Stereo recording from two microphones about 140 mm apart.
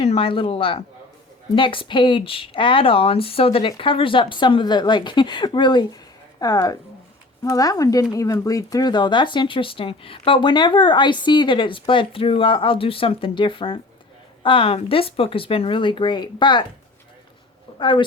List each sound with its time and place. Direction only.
0.0 s speech: 45° left (ahead or behind)
17.7 s speech: 35° left (ahead or behind)